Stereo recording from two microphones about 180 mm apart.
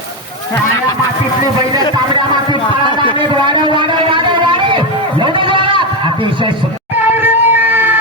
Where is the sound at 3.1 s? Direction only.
25° right (ahead or behind).